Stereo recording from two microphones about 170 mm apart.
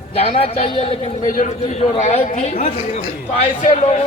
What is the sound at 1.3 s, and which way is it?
A man's voice, 45° left (ahead or behind).